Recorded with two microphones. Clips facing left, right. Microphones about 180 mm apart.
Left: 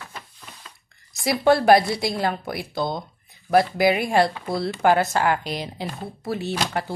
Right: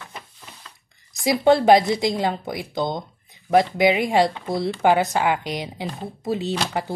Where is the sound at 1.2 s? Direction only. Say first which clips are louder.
Right 2 dB; 20° right (ahead or behind).